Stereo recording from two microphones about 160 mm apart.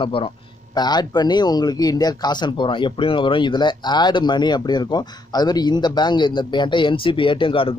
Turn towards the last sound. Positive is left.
turn(degrees=35)  # may be behind; listen again after turning